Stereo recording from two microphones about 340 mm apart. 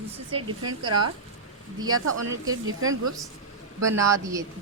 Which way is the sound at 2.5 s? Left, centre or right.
Right.